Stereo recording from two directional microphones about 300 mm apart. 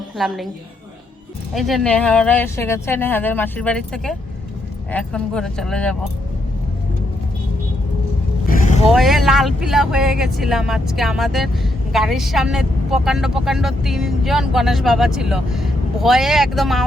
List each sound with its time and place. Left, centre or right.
0.2 s speech: centre
1.5 s speech: centre
8.4 s vehicle: left
8.9 s speech: centre